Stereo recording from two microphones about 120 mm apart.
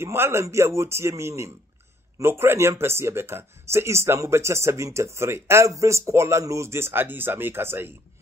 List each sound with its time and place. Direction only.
0.0 s speech: 20° right (ahead or behind)